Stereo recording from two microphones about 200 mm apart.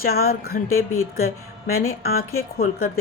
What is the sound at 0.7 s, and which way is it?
Speech, 90° left.